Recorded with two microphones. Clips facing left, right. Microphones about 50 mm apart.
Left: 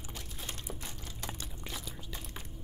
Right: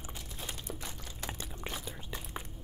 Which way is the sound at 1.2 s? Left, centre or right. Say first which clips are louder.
Right 3 dB; right.